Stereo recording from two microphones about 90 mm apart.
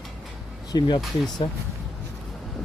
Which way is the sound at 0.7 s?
55° left (ahead or behind).